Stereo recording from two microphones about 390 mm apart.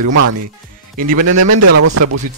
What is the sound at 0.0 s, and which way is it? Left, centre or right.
Speech, right.